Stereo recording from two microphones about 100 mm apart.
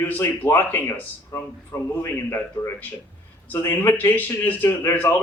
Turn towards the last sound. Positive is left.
turn(degrees=20)  # may be behind; listen again after turning